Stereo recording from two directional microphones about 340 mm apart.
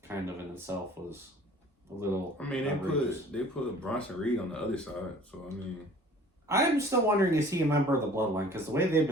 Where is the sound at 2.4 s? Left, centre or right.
Centre.